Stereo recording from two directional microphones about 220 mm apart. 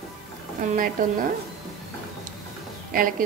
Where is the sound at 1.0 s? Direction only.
40° right (ahead or behind).